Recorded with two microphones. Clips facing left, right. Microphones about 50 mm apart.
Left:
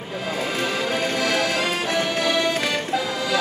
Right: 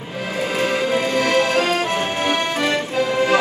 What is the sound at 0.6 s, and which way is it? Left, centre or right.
Music, right.